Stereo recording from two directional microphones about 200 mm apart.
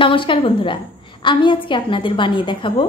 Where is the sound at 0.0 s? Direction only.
25° left (ahead or behind).